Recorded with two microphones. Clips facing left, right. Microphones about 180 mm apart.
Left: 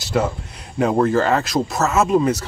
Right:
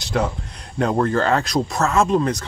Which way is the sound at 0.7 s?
5° left (ahead or behind).